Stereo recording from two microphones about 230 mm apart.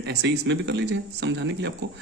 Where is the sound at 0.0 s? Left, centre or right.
Right.